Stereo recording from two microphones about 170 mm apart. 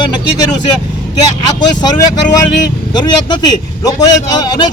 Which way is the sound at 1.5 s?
25° left (ahead or behind).